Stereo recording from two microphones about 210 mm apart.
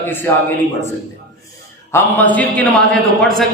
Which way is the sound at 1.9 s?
10° left (ahead or behind).